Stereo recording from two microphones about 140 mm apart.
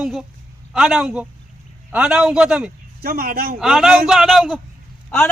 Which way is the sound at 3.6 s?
5° right (ahead or behind).